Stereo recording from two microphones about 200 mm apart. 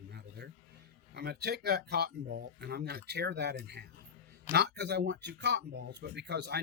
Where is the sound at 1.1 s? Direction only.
55° right (ahead or behind).